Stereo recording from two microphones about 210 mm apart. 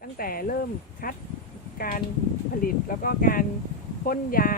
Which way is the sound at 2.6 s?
40° left (ahead or behind).